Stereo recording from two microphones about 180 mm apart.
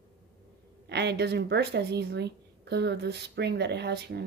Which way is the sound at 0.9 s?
70° right (ahead or behind).